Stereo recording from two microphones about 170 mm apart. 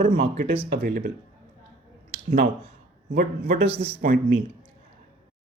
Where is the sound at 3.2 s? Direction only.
55° right (ahead or behind).